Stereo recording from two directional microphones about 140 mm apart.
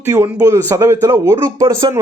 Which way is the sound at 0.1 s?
20° right (ahead or behind).